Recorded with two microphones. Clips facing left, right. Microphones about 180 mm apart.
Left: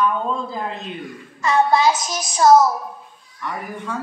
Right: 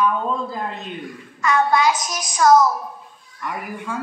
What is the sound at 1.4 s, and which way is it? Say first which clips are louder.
Child singing: left 1 dB; 30° left (ahead or behind).